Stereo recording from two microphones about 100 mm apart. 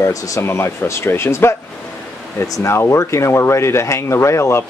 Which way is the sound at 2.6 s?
25° left (ahead or behind).